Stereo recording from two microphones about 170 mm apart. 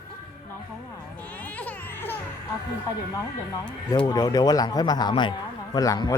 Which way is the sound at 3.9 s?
20° left (ahead or behind).